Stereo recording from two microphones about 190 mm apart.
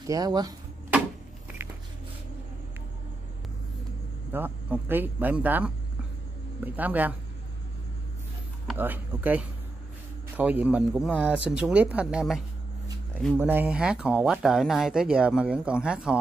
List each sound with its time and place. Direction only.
0.0 s speech: 20° right (ahead or behind)
4.3 s speech: 10° right (ahead or behind)
8.6 s speech: 10° right (ahead or behind)